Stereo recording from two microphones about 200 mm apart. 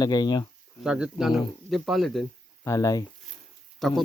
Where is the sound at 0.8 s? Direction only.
5° right (ahead or behind).